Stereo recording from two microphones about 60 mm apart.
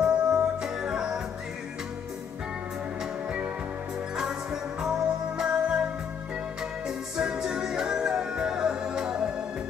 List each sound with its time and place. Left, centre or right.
0.0 s music: centre
3.3 s music: centre
7.2 s music: centre